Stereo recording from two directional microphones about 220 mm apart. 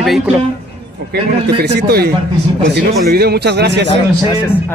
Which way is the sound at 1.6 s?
45° right (ahead or behind).